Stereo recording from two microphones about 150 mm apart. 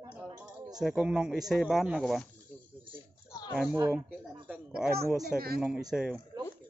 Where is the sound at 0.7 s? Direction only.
5° right (ahead or behind).